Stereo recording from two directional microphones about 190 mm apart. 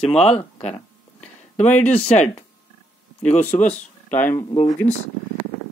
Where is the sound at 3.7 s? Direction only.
10° left (ahead or behind).